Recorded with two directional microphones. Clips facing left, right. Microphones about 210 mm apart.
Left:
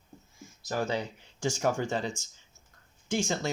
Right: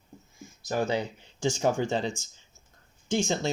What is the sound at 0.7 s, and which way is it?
Speech, 25° right (ahead or behind).